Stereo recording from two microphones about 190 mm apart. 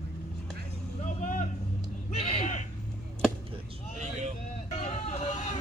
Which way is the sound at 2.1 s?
30° left (ahead or behind).